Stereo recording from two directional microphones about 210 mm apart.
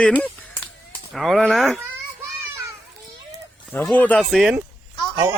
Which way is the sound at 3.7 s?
5° left (ahead or behind).